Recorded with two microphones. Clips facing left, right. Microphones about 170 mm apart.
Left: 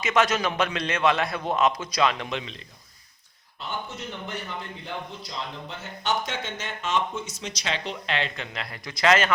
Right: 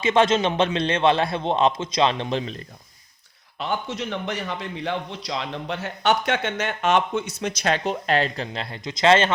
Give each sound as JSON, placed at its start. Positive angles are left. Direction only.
{"t": 0.0, "sound": "a man's voice", "side_deg": -30}
{"t": 3.6, "sound": "a man's voice", "side_deg": -90}